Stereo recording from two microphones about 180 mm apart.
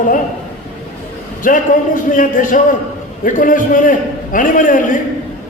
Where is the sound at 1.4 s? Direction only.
45° left (ahead or behind).